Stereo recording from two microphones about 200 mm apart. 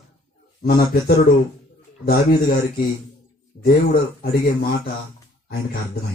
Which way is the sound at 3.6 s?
50° left (ahead or behind).